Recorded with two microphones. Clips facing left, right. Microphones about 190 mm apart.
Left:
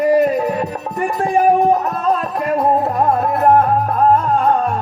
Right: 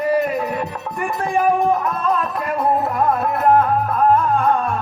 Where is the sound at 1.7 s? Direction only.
35° left (ahead or behind).